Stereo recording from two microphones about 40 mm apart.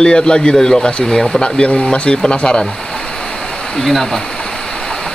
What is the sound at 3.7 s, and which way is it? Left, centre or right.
Speech, centre.